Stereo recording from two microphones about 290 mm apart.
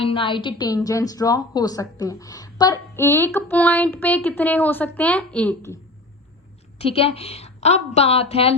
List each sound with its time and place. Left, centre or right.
0.0 s a woman's voice: centre
6.7 s a woman's voice: centre